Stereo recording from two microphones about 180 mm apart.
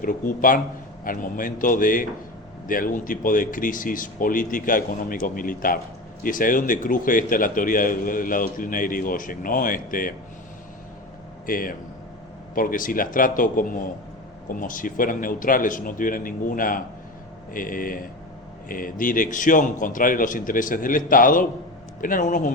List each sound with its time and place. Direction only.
0.0 s a man's voice: 50° left (ahead or behind)
11.4 s a man's voice: 50° left (ahead or behind)